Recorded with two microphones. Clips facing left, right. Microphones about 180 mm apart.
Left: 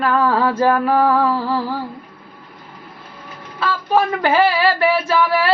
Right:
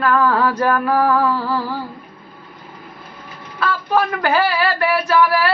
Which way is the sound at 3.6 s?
25° left (ahead or behind).